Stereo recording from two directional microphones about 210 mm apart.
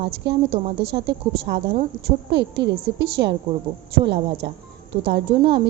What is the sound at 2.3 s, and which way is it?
A woman's voice, 55° right (ahead or behind).